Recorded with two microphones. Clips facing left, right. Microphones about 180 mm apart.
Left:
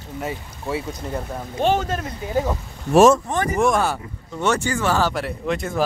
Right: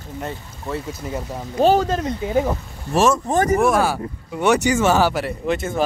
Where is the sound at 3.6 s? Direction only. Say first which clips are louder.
Right 2 dB; 5° right (ahead or behind).